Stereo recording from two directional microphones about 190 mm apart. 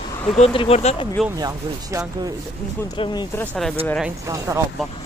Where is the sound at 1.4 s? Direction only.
15° right (ahead or behind).